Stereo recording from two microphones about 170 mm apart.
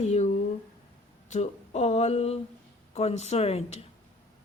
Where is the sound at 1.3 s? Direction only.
40° left (ahead or behind).